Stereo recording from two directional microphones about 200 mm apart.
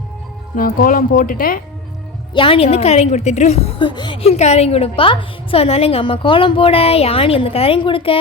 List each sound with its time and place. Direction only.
0.5 s speech: 45° left (ahead or behind)
2.3 s a woman's voice: 25° left (ahead or behind)